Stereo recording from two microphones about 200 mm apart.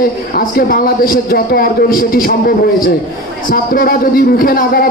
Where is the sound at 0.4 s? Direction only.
45° left (ahead or behind).